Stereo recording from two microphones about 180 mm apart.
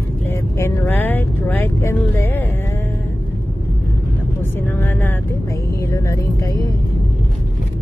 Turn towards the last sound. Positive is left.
turn(degrees=20)  # may be behind; listen again after turning